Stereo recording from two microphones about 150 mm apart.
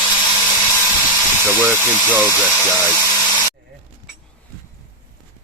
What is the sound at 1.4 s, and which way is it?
Speech, 15° right (ahead or behind).